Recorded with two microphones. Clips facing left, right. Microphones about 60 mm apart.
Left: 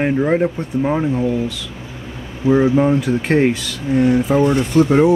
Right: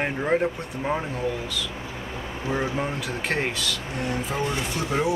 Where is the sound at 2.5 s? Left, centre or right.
Centre.